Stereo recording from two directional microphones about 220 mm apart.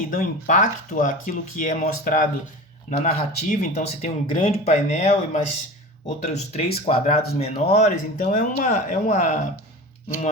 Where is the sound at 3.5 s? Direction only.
30° left (ahead or behind).